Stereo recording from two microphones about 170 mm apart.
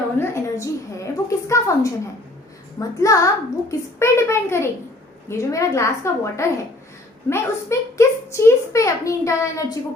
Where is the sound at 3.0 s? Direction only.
20° left (ahead or behind).